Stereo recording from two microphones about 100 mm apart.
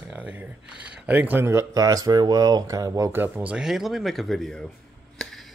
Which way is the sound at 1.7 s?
35° right (ahead or behind).